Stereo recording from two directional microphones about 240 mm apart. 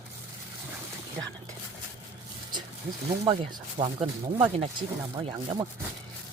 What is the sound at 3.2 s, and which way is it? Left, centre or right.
Speech, centre.